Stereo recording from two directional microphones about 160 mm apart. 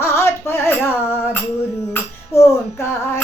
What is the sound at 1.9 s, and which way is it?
Female singing, 15° left (ahead or behind).